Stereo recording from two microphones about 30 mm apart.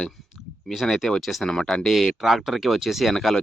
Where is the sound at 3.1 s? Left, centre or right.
Centre.